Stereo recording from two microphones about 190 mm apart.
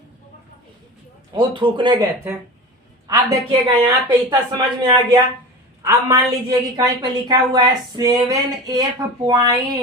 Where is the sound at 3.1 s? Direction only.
20° right (ahead or behind).